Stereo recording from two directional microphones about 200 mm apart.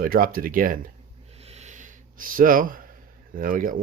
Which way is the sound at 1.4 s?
30° right (ahead or behind).